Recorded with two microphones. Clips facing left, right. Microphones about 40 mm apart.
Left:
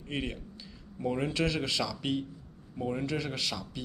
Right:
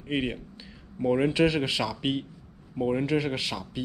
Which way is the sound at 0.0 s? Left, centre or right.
Right.